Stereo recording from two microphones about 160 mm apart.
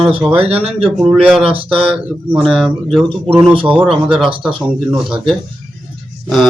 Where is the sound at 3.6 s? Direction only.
10° right (ahead or behind).